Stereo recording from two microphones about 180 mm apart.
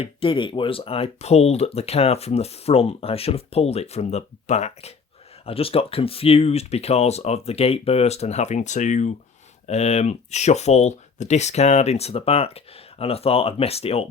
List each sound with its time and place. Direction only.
0.0 s speech: 30° left (ahead or behind)